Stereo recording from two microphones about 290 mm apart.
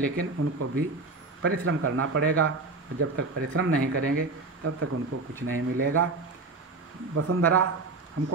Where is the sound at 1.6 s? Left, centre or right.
Right.